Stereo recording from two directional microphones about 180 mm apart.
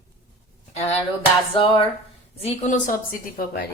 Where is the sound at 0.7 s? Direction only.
35° left (ahead or behind).